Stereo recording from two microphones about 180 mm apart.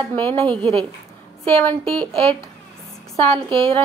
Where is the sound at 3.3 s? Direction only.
30° right (ahead or behind).